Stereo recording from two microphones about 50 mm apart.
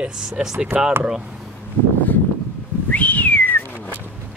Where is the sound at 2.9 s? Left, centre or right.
Left.